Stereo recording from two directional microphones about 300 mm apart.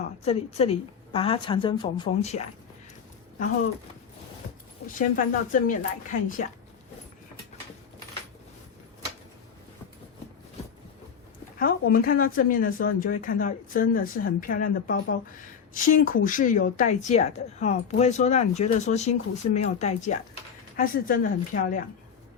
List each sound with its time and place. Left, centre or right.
0.3 s a woman's voice: left
4.9 s a woman's voice: left
11.6 s a woman's voice: left